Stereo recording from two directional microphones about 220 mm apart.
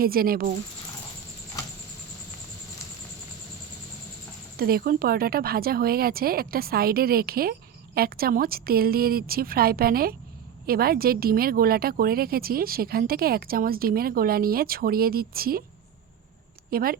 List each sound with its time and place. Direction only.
0.0 s speech: 40° right (ahead or behind)
4.5 s speech: 45° right (ahead or behind)
16.7 s speech: 40° right (ahead or behind)